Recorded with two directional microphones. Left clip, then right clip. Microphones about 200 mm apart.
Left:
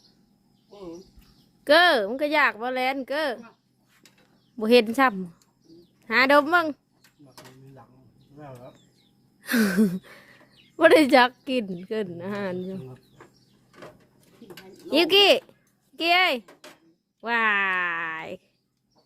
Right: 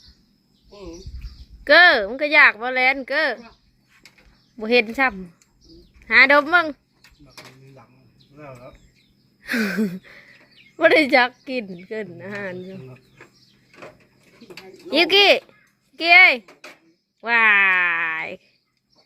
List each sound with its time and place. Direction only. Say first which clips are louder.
1.6 s speech: right 5 dB; 10° left (ahead or behind)
4.6 s speech: right 1 dB; 20° left (ahead or behind)
9.4 s a sound: even; 20° left (ahead or behind)
10.8 s speech: right 1 dB; 20° left (ahead or behind)
11.9 s speech: left 1 dB; 20° left (ahead or behind)
14.5 s speech: right 2 dB; 10° left (ahead or behind)